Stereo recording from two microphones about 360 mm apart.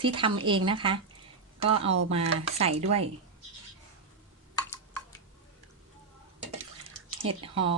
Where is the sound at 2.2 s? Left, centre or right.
Right.